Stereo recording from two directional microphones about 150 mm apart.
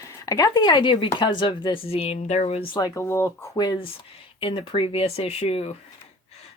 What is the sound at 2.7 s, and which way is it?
Speech, 20° left (ahead or behind).